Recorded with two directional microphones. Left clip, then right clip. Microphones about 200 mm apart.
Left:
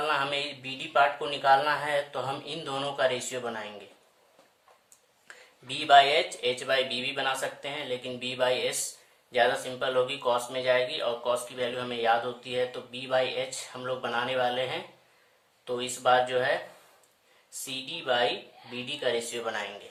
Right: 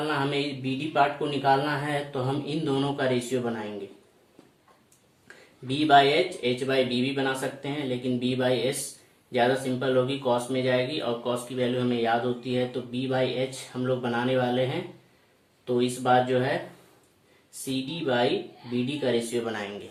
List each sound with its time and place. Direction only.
0.0 s mantra: 30° left (ahead or behind)
0.6 s speech: 30° left (ahead or behind)
5.6 s speech: 30° left (ahead or behind)
17.7 s speech: 30° left (ahead or behind)